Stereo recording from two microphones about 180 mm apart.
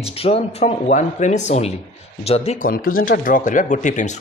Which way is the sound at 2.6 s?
55° left (ahead or behind).